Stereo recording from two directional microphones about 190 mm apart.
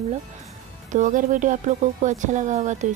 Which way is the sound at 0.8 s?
40° right (ahead or behind).